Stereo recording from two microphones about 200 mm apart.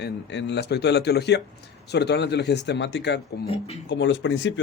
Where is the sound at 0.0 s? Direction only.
60° left (ahead or behind).